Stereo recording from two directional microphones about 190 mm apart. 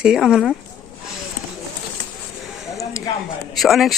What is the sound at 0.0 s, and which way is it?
Speech, 5° right (ahead or behind).